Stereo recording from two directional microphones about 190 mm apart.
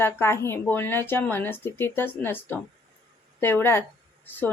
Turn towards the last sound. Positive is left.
turn(degrees=10)  # may be behind; listen again after turning